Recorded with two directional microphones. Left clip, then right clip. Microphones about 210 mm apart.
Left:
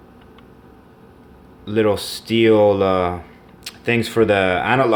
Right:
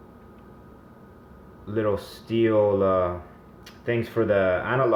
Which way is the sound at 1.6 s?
40° left (ahead or behind).